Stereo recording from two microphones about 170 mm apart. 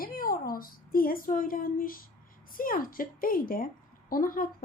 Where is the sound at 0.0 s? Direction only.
55° left (ahead or behind).